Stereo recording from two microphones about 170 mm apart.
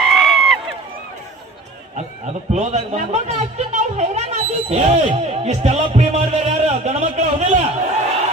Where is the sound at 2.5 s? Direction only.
40° right (ahead or behind).